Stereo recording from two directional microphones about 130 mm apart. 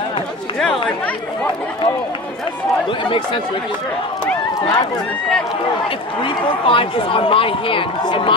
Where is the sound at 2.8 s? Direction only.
40° left (ahead or behind).